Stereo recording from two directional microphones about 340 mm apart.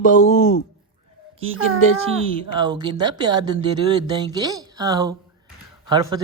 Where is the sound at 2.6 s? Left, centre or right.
Centre.